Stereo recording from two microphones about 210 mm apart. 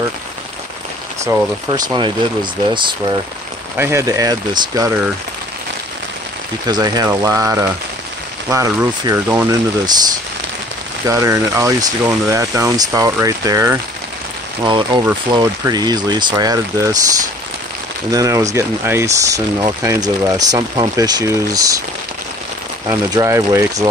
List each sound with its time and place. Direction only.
1.7 s speech: 20° right (ahead or behind)
3.7 s speech: 10° right (ahead or behind)
6.7 s speech: 15° right (ahead or behind)
11.1 s speech: 15° right (ahead or behind)
18.1 s speech: 15° right (ahead or behind)
22.8 s speech: 15° right (ahead or behind)